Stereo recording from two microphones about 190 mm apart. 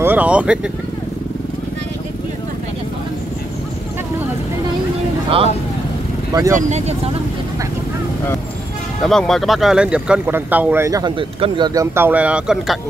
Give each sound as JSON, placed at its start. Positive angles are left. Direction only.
{"t": 0.0, "sound": "speech", "side_deg": -10}
{"t": 6.3, "sound": "speech", "side_deg": -15}
{"t": 9.0, "sound": "speech", "side_deg": 0}